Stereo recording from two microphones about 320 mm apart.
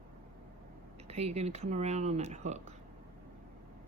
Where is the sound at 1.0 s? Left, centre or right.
Centre.